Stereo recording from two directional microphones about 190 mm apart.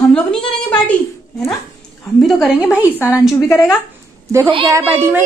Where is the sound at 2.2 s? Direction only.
Centre (ahead or behind).